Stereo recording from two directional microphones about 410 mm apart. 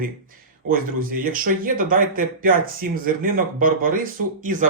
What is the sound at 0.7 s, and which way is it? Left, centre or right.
Speech, right.